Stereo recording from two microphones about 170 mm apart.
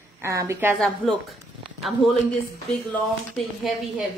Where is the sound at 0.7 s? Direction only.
Centre (ahead or behind).